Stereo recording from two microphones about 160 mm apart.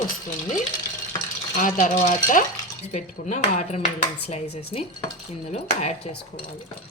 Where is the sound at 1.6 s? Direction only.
55° left (ahead or behind).